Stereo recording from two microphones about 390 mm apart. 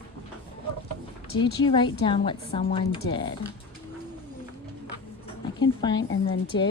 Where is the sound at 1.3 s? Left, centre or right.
Centre.